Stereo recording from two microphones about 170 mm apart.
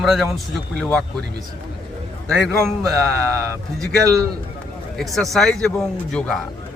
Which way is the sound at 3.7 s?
20° right (ahead or behind).